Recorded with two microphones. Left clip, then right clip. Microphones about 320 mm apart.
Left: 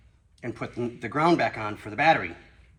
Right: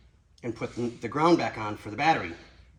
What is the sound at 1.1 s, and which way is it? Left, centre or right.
Speech, left.